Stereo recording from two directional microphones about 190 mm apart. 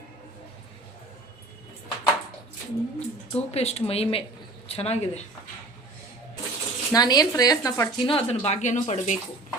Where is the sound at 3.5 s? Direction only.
35° left (ahead or behind).